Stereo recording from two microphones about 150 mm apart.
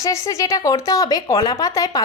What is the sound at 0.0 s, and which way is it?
Speech, 20° left (ahead or behind).